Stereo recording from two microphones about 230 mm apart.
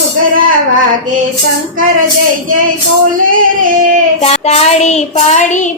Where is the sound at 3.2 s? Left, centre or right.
Right.